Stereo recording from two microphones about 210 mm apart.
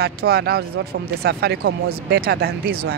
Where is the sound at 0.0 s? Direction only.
50° right (ahead or behind).